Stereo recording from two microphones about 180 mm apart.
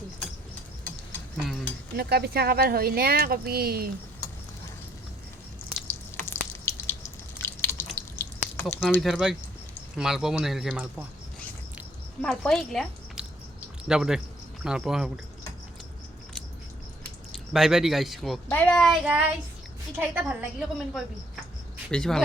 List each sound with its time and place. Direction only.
2.0 s speech: 60° right (ahead or behind)
6.2 s drip: 15° left (ahead or behind)
8.6 s a woman's voice: 10° left (ahead or behind)
12.2 s a woman's voice: 5° left (ahead or behind)
17.3 s a woman's voice: centre (ahead or behind)